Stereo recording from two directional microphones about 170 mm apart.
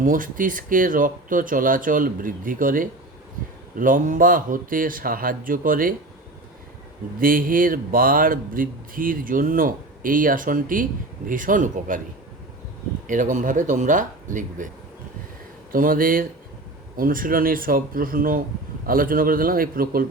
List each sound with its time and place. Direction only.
0.0 s speech: 55° right (ahead or behind)
7.2 s speech: 55° right (ahead or behind)
13.1 s speech: 50° right (ahead or behind)
15.7 s speech: 55° right (ahead or behind)